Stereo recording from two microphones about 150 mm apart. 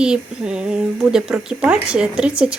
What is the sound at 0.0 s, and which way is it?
Speech, 5° right (ahead or behind).